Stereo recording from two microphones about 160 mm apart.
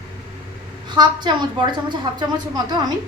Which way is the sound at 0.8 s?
25° right (ahead or behind).